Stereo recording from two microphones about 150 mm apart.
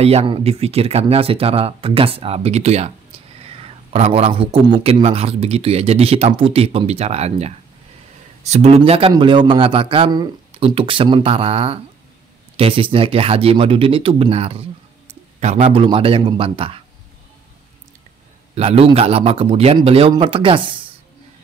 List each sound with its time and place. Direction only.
0.0 s speech: 45° right (ahead or behind)
18.5 s a man's voice: 45° right (ahead or behind)